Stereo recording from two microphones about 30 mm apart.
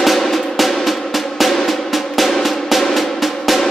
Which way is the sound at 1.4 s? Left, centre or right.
Centre.